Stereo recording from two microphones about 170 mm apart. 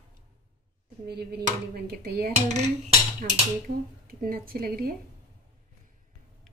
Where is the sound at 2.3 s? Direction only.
45° right (ahead or behind).